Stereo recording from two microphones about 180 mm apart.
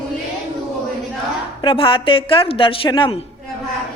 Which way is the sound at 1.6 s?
30° left (ahead or behind).